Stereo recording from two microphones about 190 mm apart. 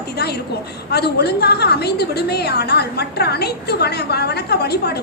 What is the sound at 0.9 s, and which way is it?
A woman's voice, 60° left (ahead or behind).